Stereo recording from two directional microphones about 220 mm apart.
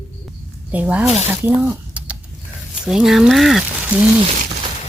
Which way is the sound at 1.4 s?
10° right (ahead or behind).